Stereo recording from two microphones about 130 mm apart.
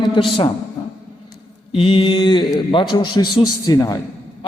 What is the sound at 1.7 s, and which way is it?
A man's voice, 45° left (ahead or behind).